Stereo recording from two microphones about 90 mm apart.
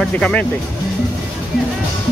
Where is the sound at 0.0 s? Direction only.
10° left (ahead or behind).